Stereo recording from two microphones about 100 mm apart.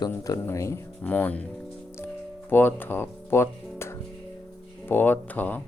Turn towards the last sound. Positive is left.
turn(degrees=15)  # may be behind; listen again after turning